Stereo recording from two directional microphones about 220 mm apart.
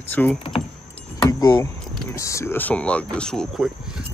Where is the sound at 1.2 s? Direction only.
15° left (ahead or behind).